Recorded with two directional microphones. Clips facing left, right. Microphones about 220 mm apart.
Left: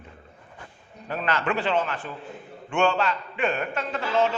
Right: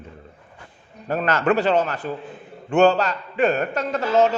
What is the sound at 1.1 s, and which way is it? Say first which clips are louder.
A man's voice: right 7 dB; 45° right (ahead or behind).